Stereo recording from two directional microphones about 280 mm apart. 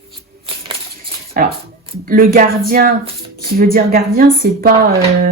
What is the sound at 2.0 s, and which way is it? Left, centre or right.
A woman's voice, right.